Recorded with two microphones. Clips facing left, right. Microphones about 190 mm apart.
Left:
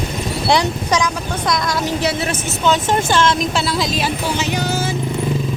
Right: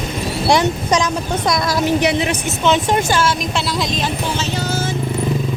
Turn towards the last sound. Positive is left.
turn(degrees=15)  # may be behind; listen again after turning